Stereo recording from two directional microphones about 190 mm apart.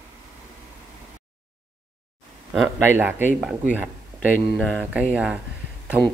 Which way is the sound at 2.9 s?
10° right (ahead or behind).